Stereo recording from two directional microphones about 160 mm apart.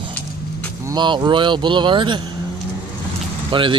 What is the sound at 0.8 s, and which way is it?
Speech, 30° right (ahead or behind).